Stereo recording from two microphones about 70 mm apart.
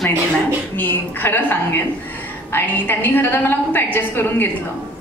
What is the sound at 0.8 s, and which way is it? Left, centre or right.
A woman's voice, left.